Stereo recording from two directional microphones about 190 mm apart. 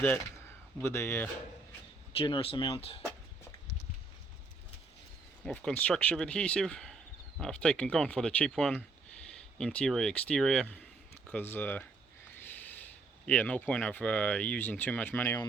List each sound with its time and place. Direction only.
0.8 s speech: 10° left (ahead or behind)
2.1 s speech: 30° left (ahead or behind)
5.5 s speech: 5° left (ahead or behind)